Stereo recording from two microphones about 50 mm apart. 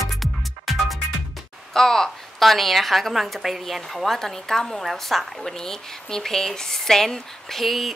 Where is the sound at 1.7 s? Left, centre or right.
Centre.